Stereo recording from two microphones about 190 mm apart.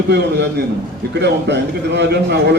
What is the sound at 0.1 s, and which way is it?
A man's voice, 65° right (ahead or behind).